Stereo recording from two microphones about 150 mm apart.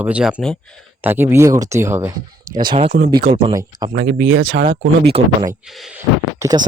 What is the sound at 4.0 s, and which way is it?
Speech, 90° right.